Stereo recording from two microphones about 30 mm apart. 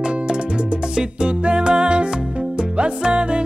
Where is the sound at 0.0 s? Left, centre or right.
Right.